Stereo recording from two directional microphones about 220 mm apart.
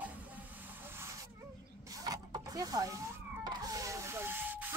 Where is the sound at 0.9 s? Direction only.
10° right (ahead or behind).